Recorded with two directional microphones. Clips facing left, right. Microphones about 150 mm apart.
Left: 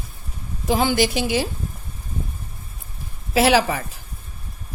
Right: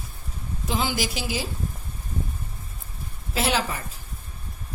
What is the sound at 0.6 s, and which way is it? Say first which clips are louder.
Speech: left 8 dB; 60° left (ahead or behind).